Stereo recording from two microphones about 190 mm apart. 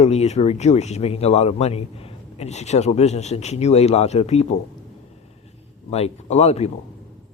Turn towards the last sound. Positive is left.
turn(degrees=35)  # may be behind; listen again after turning